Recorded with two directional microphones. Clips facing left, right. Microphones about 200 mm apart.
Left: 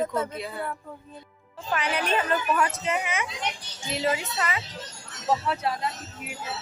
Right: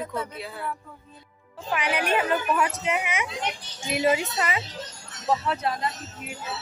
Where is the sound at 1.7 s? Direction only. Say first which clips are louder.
Right 1 dB; 10° right (ahead or behind).